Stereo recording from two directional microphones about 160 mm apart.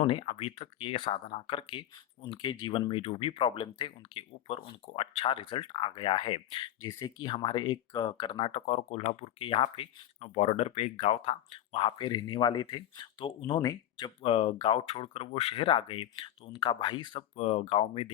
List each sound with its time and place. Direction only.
0.0 s speech: 35° left (ahead or behind)
8.6 s speech: 45° left (ahead or behind)